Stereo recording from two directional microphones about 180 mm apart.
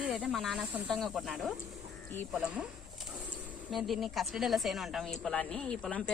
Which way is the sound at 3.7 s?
Centre (ahead or behind).